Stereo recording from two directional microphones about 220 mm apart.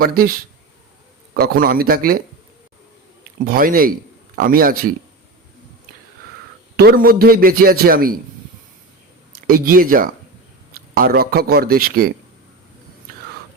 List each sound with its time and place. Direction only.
0.0 s a man's voice: 45° right (ahead or behind)
3.4 s speech: 40° right (ahead or behind)
6.7 s a man's voice: 45° right (ahead or behind)
9.5 s a man's voice: 40° right (ahead or behind)